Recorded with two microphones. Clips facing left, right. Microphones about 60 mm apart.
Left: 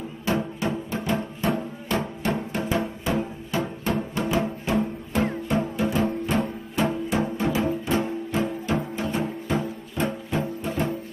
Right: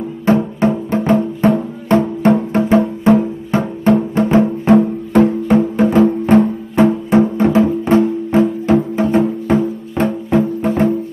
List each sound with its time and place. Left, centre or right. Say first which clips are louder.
0.2 s music: right 12 dB; right
4.7 s music: right 12 dB; right
10.0 s music: right 12 dB; right